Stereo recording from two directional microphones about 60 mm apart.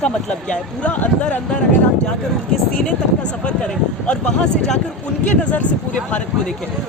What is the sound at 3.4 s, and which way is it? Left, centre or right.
Speech, centre.